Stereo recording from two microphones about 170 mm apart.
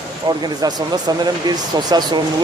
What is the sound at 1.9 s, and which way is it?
Speech, 25° right (ahead or behind).